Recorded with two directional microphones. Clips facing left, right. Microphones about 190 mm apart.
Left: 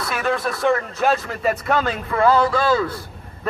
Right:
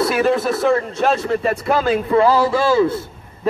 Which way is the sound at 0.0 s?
30° right (ahead or behind).